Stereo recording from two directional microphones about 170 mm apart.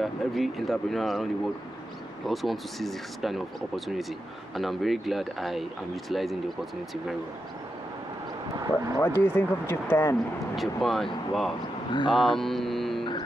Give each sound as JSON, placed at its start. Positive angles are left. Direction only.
{"t": 0.0, "sound": "speech", "side_deg": 0}
{"t": 8.9, "sound": "speech", "side_deg": 15}
{"t": 10.5, "sound": "speech", "side_deg": 0}
{"t": 11.9, "sound": "speech", "side_deg": 30}
{"t": 12.2, "sound": "mantra", "side_deg": 0}